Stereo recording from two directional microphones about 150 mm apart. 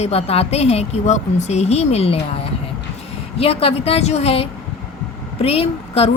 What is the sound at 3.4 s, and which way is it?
A woman's voice, 40° left (ahead or behind).